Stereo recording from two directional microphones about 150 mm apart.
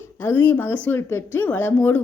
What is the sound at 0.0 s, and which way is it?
A woman's voice, 15° left (ahead or behind).